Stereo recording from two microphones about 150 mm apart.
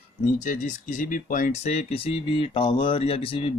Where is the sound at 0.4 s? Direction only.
55° left (ahead or behind).